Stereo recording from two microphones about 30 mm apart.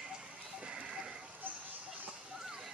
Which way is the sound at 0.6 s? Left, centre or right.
Right.